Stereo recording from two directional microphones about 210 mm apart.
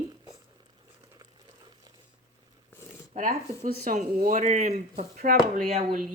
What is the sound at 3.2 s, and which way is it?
Speech, 40° right (ahead or behind).